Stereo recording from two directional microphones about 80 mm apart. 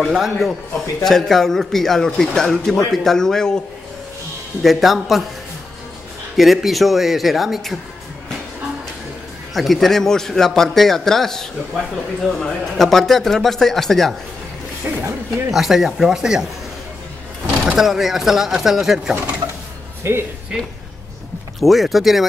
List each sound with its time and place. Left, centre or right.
0.0 s a man's voice: centre
4.6 s a man's voice: centre
6.3 s a man's voice: centre
9.5 s a man's voice: centre
15.0 s a sound: right
15.5 s a man's voice: centre
17.6 s a man's voice: centre
20.0 s speech: right
21.5 s a man's voice: centre